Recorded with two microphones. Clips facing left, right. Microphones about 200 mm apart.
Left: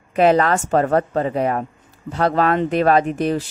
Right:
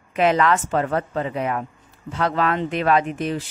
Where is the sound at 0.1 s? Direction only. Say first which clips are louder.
Left 3 dB; 40° left (ahead or behind).